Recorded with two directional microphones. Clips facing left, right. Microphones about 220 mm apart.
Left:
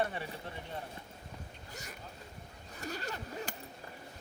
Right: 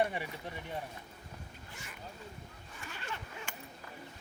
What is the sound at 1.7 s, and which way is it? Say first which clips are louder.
Speech: left 5 dB; 40° left (ahead or behind).